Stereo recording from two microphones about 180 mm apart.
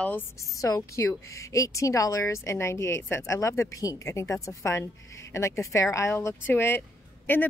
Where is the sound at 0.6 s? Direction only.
20° left (ahead or behind).